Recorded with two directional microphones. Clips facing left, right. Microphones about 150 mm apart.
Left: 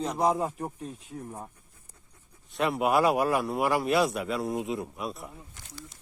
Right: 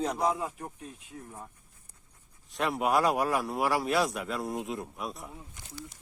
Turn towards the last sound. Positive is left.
turn(degrees=0)  # may be behind; listen again after turning